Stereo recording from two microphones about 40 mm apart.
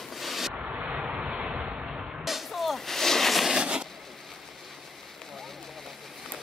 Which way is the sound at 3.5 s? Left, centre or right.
Right.